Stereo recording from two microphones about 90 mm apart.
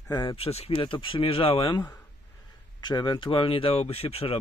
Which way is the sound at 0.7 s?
70° left (ahead or behind).